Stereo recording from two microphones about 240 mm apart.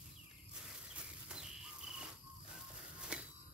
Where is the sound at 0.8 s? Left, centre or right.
Centre.